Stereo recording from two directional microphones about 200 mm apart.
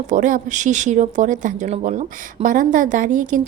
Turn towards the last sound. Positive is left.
turn(degrees=-40)  # may be behind; listen again after turning